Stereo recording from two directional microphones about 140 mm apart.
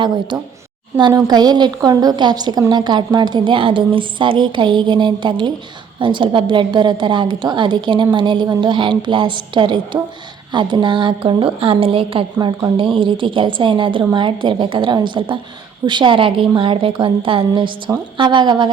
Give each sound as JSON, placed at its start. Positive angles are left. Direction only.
{"t": 0.0, "sound": "a woman's voice", "side_deg": -35}